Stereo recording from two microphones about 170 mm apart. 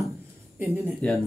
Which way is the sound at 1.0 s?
10° left (ahead or behind).